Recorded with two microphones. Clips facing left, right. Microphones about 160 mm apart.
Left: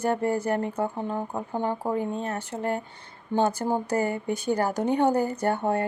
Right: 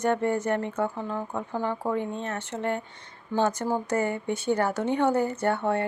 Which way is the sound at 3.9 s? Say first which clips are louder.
Left 1 dB; 35° left (ahead or behind).